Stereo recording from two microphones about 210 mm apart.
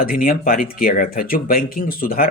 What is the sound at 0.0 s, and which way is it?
Speech, 45° left (ahead or behind).